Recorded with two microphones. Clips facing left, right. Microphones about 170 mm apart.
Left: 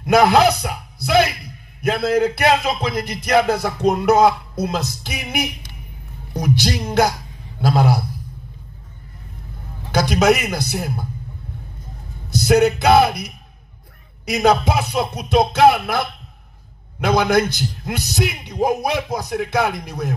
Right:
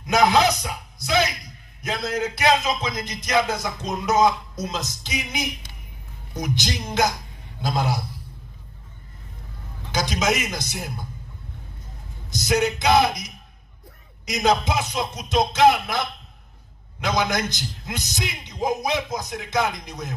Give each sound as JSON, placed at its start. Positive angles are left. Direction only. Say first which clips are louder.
{"t": 0.0, "sound": "a man's voice", "louder": "left 5 dB", "side_deg": 60}
{"t": 9.8, "sound": "a man's voice", "louder": "left 8 dB", "side_deg": 60}
{"t": 12.4, "sound": "a man's voice", "louder": "left 7 dB", "side_deg": 60}